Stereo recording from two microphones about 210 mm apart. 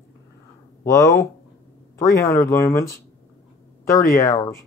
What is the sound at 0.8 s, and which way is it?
Speech, 15° left (ahead or behind).